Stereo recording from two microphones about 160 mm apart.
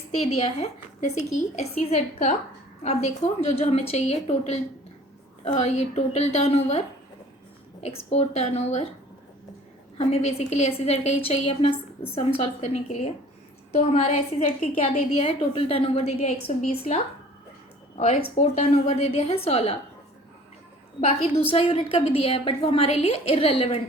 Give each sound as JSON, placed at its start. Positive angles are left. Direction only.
{"t": 0.2, "sound": "a woman's voice", "side_deg": 35}
{"t": 10.0, "sound": "a woman's voice", "side_deg": 40}
{"t": 21.5, "sound": "a woman's voice", "side_deg": 35}